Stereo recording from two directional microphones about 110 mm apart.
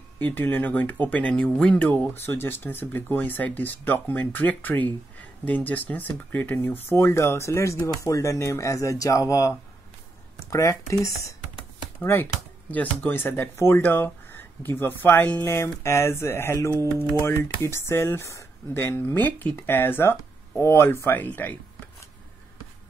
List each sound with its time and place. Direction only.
0.2 s speech: 15° left (ahead or behind)
10.5 s speech: 30° left (ahead or behind)